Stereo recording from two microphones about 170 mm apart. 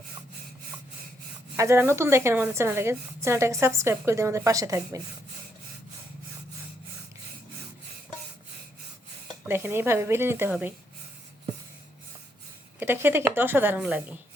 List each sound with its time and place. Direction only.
1.5 s a woman's voice: 15° right (ahead or behind)
9.5 s a woman's voice: 15° right (ahead or behind)
12.8 s a woman's voice: 15° right (ahead or behind)